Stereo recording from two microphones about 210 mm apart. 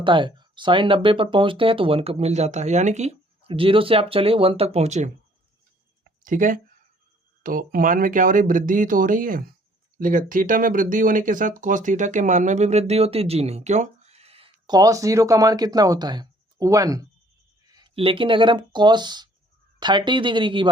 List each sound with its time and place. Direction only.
0.0 s speech: 25° right (ahead or behind)
6.2 s speech: 40° right (ahead or behind); by 20.7 s 25° right (ahead or behind)